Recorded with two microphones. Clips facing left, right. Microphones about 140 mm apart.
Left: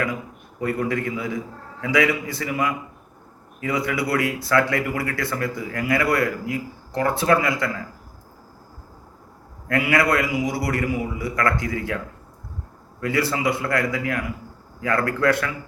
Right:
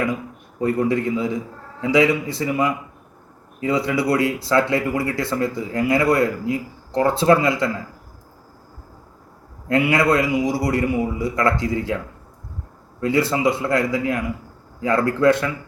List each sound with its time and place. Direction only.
0.6 s speech: 25° right (ahead or behind)
9.6 s speech: 25° right (ahead or behind)
13.0 s a man's voice: 25° right (ahead or behind)